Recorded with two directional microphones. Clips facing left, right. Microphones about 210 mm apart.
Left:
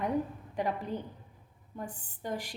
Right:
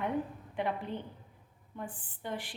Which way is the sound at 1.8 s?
40° left (ahead or behind).